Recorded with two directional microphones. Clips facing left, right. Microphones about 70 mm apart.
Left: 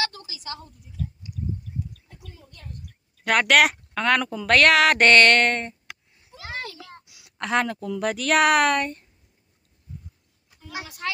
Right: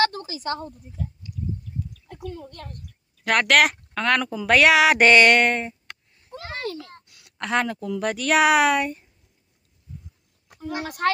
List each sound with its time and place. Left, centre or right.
0.0 s a woman's voice: right
2.0 s a child's voice: right
3.3 s speech: centre
5.9 s a sound: centre
6.8 s a sound: left
7.1 s speech: centre
10.5 s a woman's voice: right